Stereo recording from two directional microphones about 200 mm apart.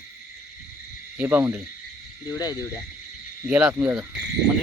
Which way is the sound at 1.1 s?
10° right (ahead or behind).